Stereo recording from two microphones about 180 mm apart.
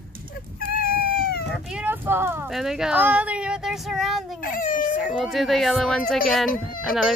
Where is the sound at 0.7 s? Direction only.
55° left (ahead or behind).